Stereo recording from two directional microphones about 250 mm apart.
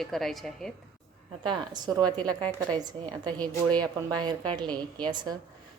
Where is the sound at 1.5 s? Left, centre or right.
Centre.